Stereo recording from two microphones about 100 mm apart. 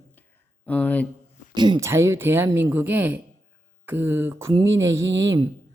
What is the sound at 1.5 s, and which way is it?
Speech, 45° right (ahead or behind).